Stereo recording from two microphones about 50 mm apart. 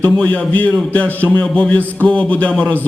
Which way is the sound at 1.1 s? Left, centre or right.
Left.